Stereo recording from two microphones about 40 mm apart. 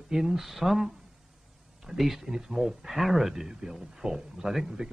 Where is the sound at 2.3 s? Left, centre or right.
Centre.